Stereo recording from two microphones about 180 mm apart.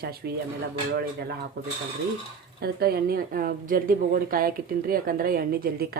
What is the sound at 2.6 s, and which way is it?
A woman's voice, 60° right (ahead or behind).